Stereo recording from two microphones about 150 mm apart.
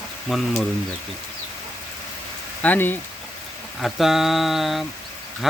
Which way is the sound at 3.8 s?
Centre (ahead or behind).